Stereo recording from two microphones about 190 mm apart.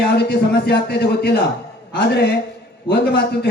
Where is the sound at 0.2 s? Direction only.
60° left (ahead or behind).